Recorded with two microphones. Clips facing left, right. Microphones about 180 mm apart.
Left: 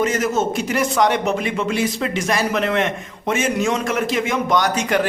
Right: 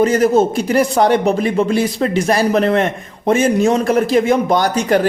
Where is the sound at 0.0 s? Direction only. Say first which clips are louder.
Right 7 dB; 35° right (ahead or behind).